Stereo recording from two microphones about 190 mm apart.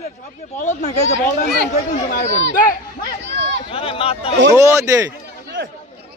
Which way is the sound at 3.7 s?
30° left (ahead or behind).